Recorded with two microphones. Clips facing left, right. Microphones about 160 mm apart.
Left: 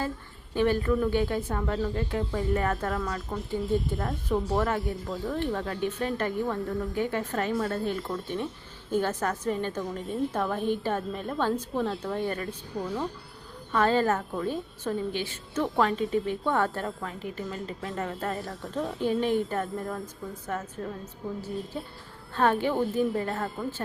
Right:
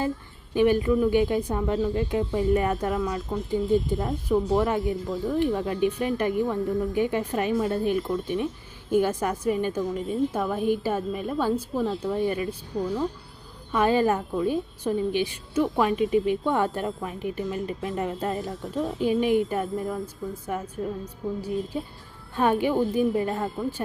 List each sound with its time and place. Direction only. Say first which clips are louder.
0.5 s a woman's voice: right 4 dB; 15° right (ahead or behind)
13.7 s a woman's voice: right 2 dB; 15° right (ahead or behind)